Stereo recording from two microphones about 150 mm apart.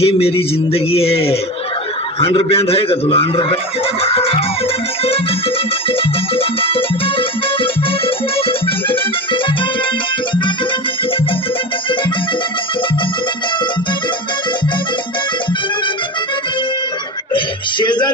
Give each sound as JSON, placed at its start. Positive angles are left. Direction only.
{"t": 0.0, "sound": "speech", "side_deg": 40}
{"t": 4.0, "sound": "music", "side_deg": 40}
{"t": 5.9, "sound": "music", "side_deg": 40}
{"t": 17.3, "sound": "a sound", "side_deg": 30}